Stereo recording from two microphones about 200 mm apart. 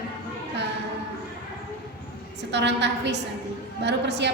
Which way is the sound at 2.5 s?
60° right (ahead or behind).